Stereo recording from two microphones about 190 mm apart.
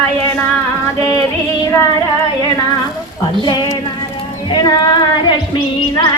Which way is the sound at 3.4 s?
20° left (ahead or behind).